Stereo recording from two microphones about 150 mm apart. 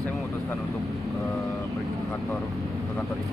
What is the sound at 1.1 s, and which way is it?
Speech, centre (ahead or behind).